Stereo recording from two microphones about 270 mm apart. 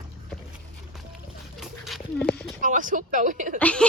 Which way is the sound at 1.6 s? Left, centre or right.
Centre.